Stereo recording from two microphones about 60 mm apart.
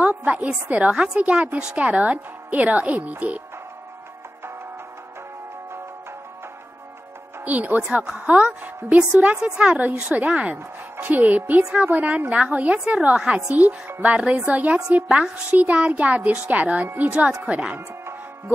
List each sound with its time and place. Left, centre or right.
0.0 s a woman's voice: right
7.4 s speech: right
7.8 s speech: centre
9.6 s a woman's voice: right